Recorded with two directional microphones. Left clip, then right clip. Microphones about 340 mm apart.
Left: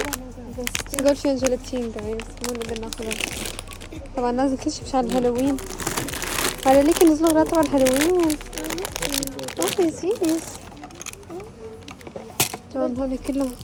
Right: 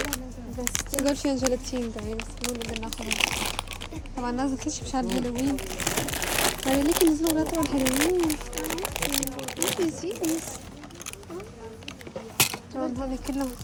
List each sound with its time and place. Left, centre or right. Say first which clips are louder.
0.6 s speech: left 6 dB; centre
4.2 s a woman's voice: left 7 dB; centre
4.9 s crumpling: left 9 dB; centre
10.1 s speech: left 7 dB; centre
12.7 s a woman's voice: left 6 dB; centre